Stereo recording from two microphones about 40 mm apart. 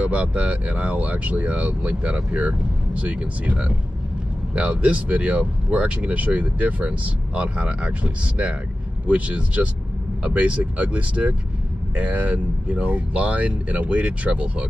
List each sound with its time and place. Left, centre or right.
0.0 s speech: right